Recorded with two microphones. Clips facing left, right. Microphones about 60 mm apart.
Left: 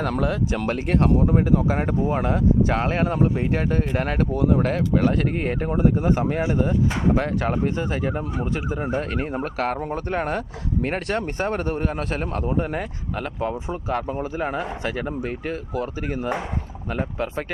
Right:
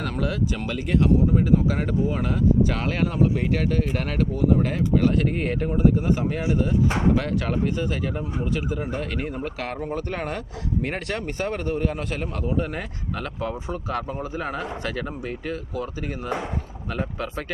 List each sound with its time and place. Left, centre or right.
0.2 s speech: left
1.6 s speech: left
4.4 s speech: left
13.1 s speech: left
15.3 s speech: left